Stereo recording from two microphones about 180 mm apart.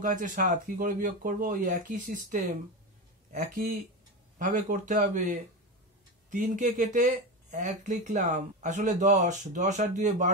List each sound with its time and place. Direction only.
0.0 s speech: 45° right (ahead or behind)
6.3 s speech: 45° right (ahead or behind)